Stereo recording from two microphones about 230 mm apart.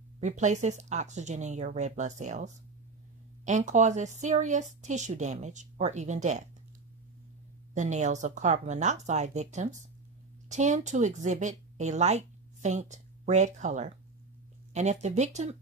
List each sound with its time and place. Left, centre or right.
0.2 s a woman's voice: right
7.7 s a woman's voice: right